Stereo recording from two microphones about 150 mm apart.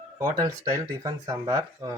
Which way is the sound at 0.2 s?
20° right (ahead or behind).